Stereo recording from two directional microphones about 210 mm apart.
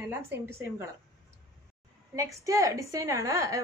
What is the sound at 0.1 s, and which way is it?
Speech, 10° right (ahead or behind).